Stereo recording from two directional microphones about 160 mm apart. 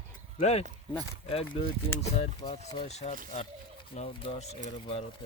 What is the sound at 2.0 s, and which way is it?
Speech, 40° left (ahead or behind).